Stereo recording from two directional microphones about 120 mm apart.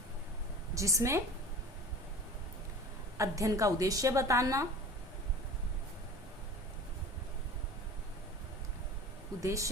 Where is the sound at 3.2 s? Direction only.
25° right (ahead or behind).